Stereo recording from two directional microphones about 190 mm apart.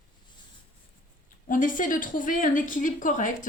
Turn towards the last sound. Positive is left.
turn(degrees=45)  # may be behind; listen again after turning